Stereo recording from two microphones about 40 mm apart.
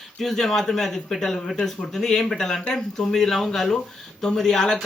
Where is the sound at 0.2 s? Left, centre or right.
Centre.